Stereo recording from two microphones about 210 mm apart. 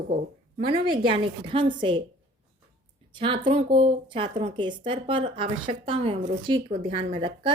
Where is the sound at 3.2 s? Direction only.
25° right (ahead or behind).